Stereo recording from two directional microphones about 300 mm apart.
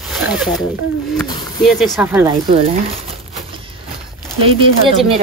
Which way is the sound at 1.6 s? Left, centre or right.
Centre.